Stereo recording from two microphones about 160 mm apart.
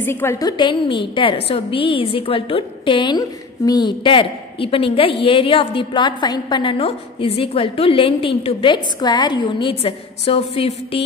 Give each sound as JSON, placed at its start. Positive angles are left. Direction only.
{"t": 0.0, "sound": "a woman's voice", "side_deg": 15}